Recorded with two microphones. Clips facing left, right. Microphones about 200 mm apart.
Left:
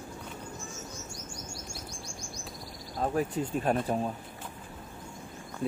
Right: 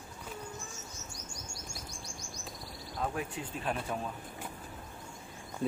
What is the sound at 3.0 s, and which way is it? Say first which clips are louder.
Speech: left 7 dB; 40° left (ahead or behind).